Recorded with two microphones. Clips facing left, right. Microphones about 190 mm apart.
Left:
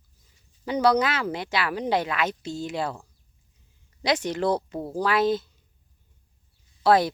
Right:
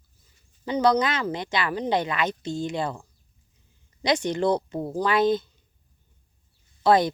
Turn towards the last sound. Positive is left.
turn(degrees=5)  # may be behind; listen again after turning